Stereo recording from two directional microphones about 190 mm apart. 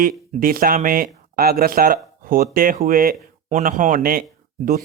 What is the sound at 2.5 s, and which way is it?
Speech, 45° right (ahead or behind).